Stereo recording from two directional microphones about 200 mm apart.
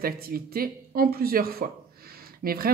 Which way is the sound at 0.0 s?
50° right (ahead or behind).